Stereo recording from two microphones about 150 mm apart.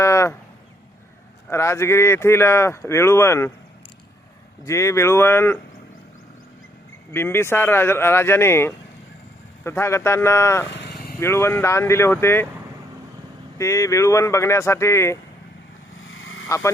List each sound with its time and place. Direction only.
0.0 s a sound: 20° left (ahead or behind)
1.5 s speech: 20° left (ahead or behind)
4.6 s speech: 20° left (ahead or behind)
7.1 s speech: 15° left (ahead or behind)
13.6 s speech: 20° left (ahead or behind)
16.5 s speech: 20° left (ahead or behind)